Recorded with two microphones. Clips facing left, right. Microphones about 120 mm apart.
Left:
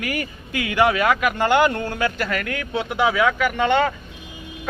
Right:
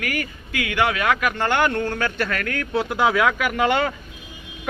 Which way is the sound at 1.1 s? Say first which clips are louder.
Left 2 dB; 10° left (ahead or behind).